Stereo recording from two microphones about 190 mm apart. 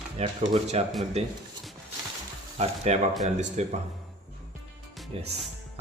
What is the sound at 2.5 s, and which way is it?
Speech, 35° right (ahead or behind).